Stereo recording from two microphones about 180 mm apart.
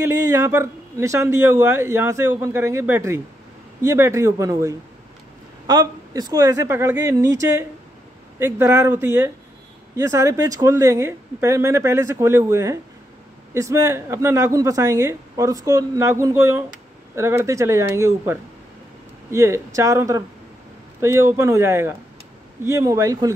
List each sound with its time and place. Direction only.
0.0 s a man's voice: 15° right (ahead or behind)